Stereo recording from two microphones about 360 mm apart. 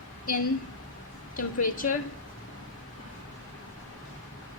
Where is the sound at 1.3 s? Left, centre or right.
Left.